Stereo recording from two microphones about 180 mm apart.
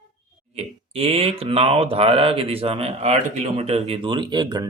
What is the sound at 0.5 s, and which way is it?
Speech, 35° right (ahead or behind).